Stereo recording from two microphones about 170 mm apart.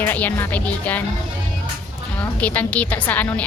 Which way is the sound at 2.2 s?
10° left (ahead or behind).